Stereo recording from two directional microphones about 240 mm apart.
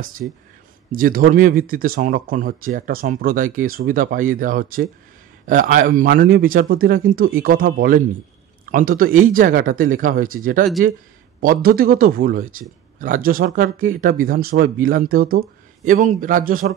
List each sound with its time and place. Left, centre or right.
0.2 s speech: right